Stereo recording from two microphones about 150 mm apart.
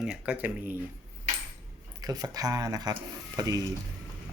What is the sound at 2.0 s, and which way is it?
Speech, 25° right (ahead or behind).